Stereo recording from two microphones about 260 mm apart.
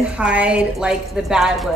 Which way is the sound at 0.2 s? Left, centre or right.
Centre.